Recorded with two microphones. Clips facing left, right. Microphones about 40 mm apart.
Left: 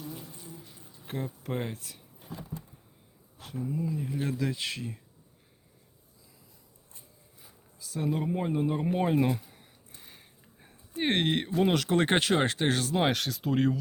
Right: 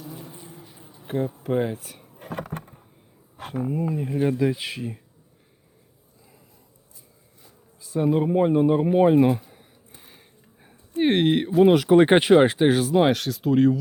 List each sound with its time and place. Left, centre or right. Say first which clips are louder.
0.2 s water: right 5 dB; right
0.6 s a sound: right 5 dB; right
1.0 s speech: right 9 dB; centre
2.1 s vehicle: right 10 dB; right
3.3 s a sound: right 8 dB; right
3.7 s speech: right 5 dB; right
4.2 s speech: right 11 dB; right
7.8 s speech: right 9 dB; right; by 13.7 s centre